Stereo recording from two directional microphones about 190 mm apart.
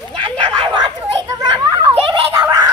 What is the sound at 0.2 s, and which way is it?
Children playing, 25° right (ahead or behind).